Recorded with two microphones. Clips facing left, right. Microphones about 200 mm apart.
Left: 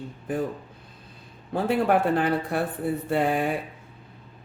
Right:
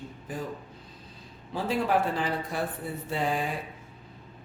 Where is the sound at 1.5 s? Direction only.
60° left (ahead or behind).